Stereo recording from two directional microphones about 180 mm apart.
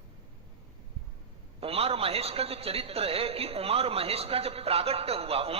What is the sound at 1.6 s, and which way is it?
A man's voice, 35° right (ahead or behind).